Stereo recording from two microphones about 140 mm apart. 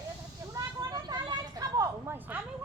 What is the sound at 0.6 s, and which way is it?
Vehicle, 30° right (ahead or behind).